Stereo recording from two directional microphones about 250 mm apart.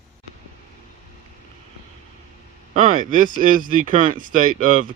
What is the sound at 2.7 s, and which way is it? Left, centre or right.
Speech, right.